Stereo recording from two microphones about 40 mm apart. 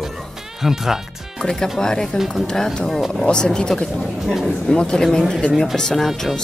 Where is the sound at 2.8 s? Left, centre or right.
Centre.